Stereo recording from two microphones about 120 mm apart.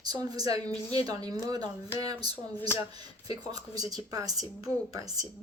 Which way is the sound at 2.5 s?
20° left (ahead or behind).